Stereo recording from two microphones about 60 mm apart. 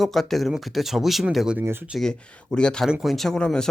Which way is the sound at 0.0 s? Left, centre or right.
Centre.